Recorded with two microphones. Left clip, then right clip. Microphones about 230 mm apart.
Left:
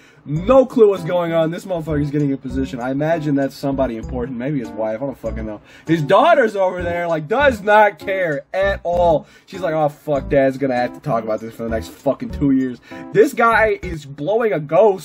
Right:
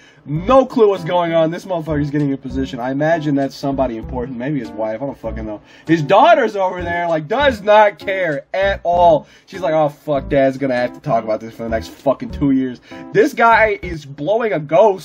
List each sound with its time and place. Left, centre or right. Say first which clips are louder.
0.4 s a man's voice: even; centre